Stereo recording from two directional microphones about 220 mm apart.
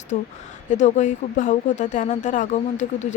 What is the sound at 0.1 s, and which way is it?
Speech, 35° left (ahead or behind).